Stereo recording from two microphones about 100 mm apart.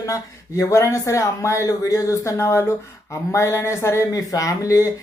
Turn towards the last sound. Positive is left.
turn(degrees=30)  # may be behind; listen again after turning